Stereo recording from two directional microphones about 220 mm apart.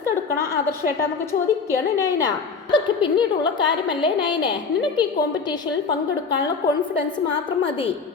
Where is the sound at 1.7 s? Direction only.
15° left (ahead or behind).